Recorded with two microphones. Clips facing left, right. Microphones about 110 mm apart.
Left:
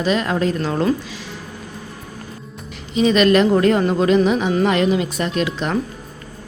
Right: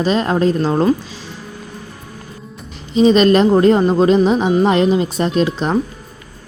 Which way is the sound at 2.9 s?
30° right (ahead or behind).